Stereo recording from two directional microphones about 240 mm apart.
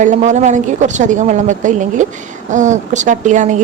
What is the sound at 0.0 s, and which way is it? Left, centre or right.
A woman's voice, right.